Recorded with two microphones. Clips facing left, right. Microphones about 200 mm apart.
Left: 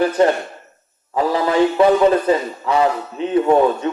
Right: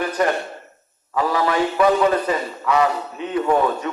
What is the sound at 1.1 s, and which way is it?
A man's voice, 30° left (ahead or behind).